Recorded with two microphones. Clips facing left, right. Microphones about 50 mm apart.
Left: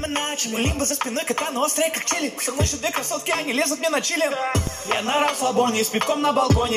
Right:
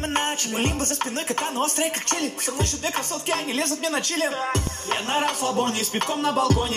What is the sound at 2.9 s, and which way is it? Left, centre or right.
Speech, left.